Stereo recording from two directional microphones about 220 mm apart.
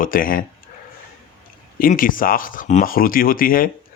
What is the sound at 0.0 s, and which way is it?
Speech, 40° left (ahead or behind).